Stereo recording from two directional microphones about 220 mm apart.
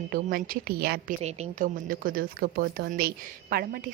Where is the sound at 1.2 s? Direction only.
35° right (ahead or behind).